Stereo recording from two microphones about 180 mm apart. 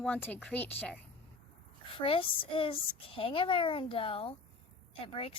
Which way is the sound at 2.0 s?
30° left (ahead or behind).